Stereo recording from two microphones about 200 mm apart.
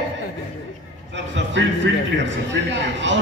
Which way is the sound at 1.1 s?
65° right (ahead or behind).